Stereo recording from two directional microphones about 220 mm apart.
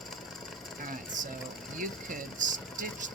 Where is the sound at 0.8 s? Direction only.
35° right (ahead or behind).